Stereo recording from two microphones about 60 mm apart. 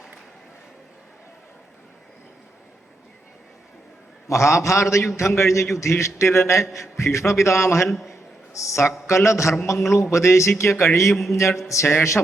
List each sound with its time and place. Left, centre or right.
4.3 s a man's voice: left
7.9 s a man's voice: centre
8.5 s a man's voice: left
11.1 s a man's voice: centre
11.3 s a man's voice: left